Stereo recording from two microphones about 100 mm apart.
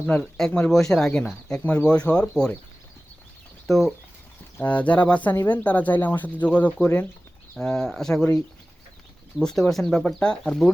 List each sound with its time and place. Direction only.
0.1 s speech: 10° left (ahead or behind)
3.7 s speech: centre (ahead or behind)
4.5 s speech: 15° left (ahead or behind)
9.4 s speech: 5° left (ahead or behind)